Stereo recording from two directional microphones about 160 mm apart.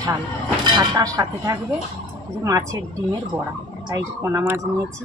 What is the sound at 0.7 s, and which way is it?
Speech, 25° right (ahead or behind).